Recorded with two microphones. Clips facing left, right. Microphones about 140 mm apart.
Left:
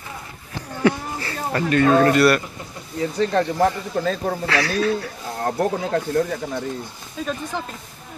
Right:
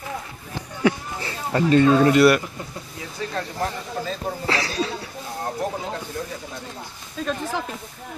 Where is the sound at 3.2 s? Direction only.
70° left (ahead or behind).